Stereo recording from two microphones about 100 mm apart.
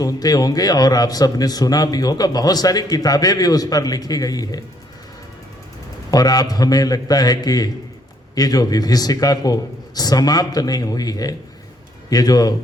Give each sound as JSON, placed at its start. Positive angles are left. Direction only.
{"t": 0.0, "sound": "a man's voice", "side_deg": 40}
{"t": 6.1, "sound": "a man's voice", "side_deg": 40}